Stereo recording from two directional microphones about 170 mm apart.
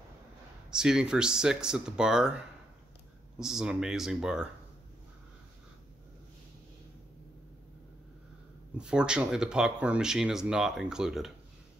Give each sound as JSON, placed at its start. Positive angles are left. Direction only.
{"t": 0.7, "sound": "speech", "side_deg": -5}
{"t": 8.7, "sound": "speech", "side_deg": -5}